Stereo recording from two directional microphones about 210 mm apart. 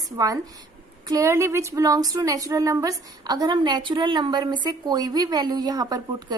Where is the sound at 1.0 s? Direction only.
15° right (ahead or behind).